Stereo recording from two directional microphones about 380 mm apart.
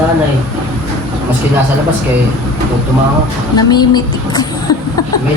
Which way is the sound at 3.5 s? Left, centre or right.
Centre.